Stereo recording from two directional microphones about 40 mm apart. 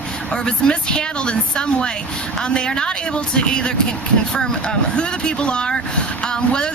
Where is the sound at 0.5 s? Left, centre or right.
Left.